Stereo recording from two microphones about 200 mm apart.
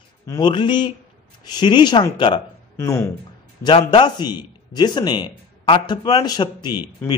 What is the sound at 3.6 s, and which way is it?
A man's voice, 25° left (ahead or behind).